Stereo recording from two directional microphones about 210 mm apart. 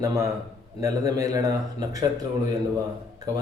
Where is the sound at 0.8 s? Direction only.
15° right (ahead or behind).